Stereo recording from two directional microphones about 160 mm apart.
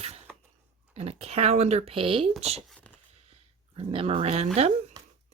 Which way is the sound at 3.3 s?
35° right (ahead or behind).